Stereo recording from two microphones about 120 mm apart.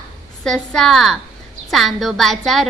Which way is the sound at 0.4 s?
5° left (ahead or behind).